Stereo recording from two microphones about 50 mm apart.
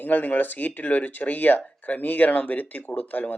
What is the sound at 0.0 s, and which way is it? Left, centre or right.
A man's voice, left.